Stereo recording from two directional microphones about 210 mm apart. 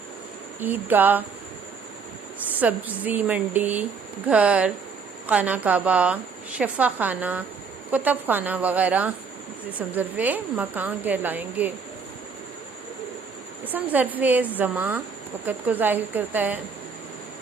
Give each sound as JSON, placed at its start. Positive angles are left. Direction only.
{"t": 0.6, "sound": "speech", "side_deg": -10}
{"t": 2.6, "sound": "speech", "side_deg": -10}
{"t": 13.7, "sound": "speech", "side_deg": -10}